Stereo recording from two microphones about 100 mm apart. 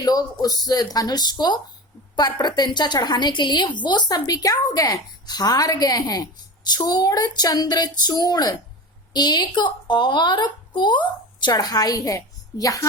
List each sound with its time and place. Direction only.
0.0 s a woman's voice: 40° left (ahead or behind)